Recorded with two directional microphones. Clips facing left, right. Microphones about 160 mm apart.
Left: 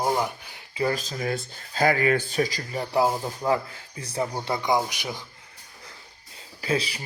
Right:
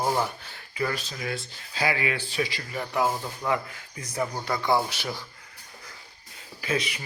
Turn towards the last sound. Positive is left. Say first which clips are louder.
# left 2 dB
turn(degrees=30)  # may be behind; listen again after turning